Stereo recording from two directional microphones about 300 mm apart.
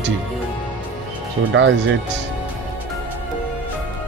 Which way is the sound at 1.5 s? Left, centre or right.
Right.